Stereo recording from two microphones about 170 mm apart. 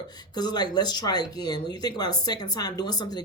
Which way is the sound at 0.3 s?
25° left (ahead or behind).